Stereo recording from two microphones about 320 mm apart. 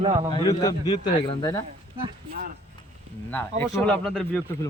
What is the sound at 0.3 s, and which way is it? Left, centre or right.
A man's voice, centre.